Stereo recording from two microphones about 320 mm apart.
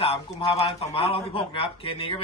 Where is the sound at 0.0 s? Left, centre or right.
Centre.